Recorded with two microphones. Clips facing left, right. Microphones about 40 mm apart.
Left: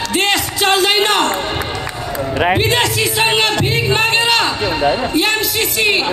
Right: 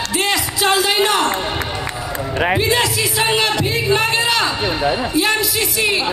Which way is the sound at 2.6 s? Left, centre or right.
Left.